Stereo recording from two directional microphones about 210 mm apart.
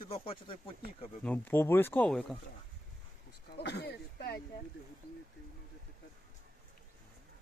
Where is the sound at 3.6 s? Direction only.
55° left (ahead or behind).